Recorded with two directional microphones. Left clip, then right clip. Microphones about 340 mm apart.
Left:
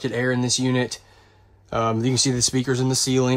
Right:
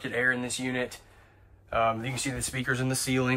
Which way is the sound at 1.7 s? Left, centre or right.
Centre.